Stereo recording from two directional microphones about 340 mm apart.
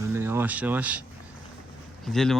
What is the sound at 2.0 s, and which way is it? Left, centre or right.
Speech, centre.